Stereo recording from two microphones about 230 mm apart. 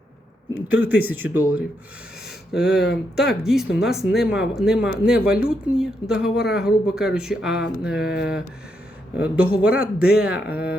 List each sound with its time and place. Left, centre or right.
0.7 s speech: centre
2.7 s speech: left
3.2 s speech: centre